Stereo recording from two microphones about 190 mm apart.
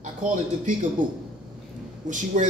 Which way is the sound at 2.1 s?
40° right (ahead or behind).